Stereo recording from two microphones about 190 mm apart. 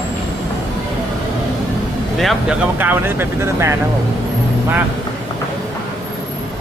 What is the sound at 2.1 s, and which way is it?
Speech, centre (ahead or behind).